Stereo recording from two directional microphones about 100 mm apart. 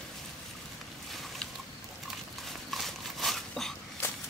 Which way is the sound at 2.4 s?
Centre (ahead or behind).